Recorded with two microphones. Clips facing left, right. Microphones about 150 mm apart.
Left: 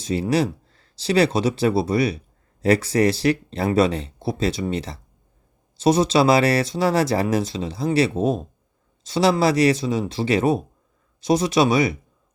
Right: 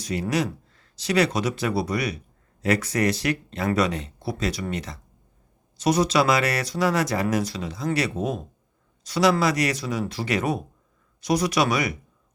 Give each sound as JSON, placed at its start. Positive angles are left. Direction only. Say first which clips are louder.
{"t": 0.0, "sound": "speech", "louder": "left 4 dB", "side_deg": 30}